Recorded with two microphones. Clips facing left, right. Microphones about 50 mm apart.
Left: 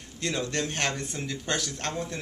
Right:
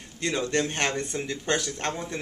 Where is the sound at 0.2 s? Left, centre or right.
Centre.